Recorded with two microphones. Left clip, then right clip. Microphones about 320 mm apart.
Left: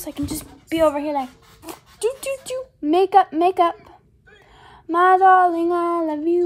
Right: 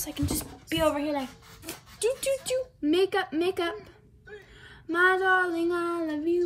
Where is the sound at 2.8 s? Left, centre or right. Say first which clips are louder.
Left 12 dB; left.